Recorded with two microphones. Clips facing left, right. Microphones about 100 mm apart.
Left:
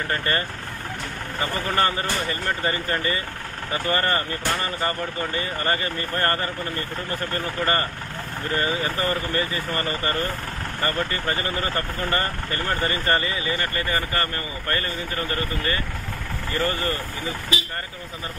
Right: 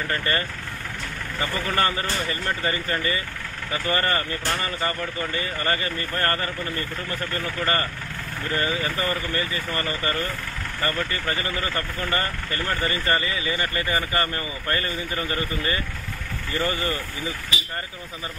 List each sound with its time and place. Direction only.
0.1 s speech: 30° left (ahead or behind)
1.4 s a man's voice: 30° left (ahead or behind)
13.6 s speech: 20° right (ahead or behind)